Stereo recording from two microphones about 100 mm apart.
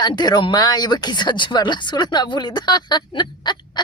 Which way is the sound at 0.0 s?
45° left (ahead or behind).